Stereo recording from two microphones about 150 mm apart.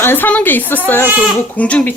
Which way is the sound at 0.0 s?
15° left (ahead or behind).